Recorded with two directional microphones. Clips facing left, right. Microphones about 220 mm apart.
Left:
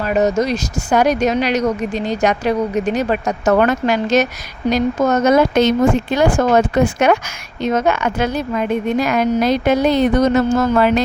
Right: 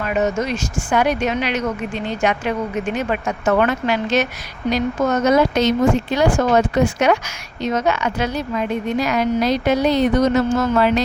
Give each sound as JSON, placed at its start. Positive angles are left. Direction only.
{"t": 0.0, "sound": "a woman's voice", "side_deg": 35}